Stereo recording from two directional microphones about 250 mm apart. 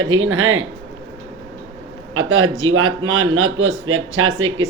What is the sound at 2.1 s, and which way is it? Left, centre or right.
Speech, right.